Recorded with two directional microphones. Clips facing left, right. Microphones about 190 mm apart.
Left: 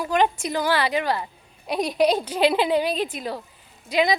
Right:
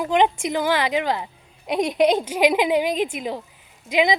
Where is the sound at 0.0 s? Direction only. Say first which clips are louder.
Right 2 dB; 20° right (ahead or behind).